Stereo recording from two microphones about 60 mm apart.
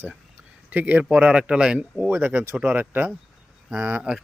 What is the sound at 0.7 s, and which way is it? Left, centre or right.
A man's voice, right.